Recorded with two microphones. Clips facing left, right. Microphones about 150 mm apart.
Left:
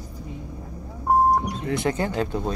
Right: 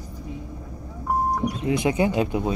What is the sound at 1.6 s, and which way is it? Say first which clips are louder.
Speech: right 3 dB; 15° right (ahead or behind).